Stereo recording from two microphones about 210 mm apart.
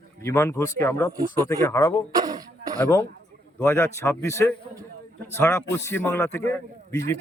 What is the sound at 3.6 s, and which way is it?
A man's voice, 10° left (ahead or behind).